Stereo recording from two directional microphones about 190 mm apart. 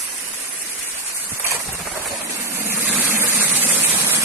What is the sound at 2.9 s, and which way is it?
Vehicle, 10° right (ahead or behind).